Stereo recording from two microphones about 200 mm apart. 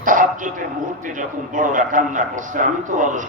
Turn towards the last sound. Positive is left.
turn(degrees=-40)  # may be behind; listen again after turning